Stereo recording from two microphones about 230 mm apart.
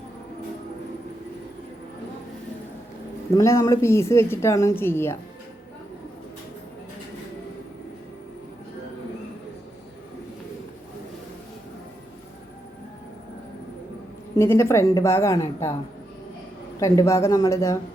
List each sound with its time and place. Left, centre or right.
3.3 s a woman's voice: centre
14.3 s a woman's voice: centre
16.8 s a woman's voice: centre